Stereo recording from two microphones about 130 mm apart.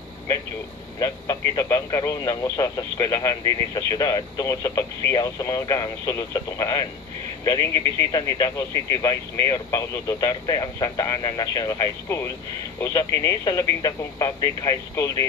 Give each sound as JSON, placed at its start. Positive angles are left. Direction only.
{"t": 0.9, "sound": "speech", "side_deg": 30}
{"t": 8.1, "sound": "speech", "side_deg": 30}